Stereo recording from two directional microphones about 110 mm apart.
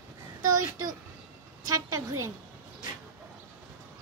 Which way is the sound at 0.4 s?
35° right (ahead or behind).